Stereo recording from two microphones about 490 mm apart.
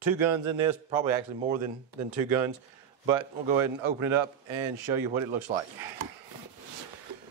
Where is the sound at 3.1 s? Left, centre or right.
Right.